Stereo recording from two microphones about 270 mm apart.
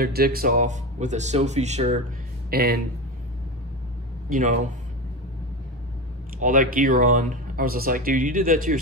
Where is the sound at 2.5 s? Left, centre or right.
Right.